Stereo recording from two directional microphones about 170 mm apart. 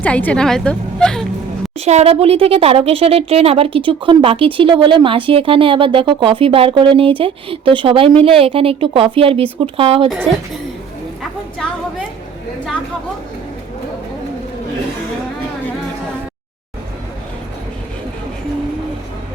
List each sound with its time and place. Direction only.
0.0 s a woman's voice: 10° left (ahead or behind)
1.8 s a woman's voice: 40° right (ahead or behind)
11.2 s a sound: centre (ahead or behind)